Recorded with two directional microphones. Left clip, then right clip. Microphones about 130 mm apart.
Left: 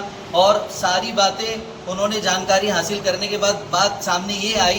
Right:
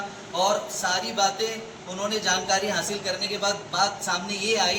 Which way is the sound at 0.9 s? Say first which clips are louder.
Left 6 dB; 10° left (ahead or behind).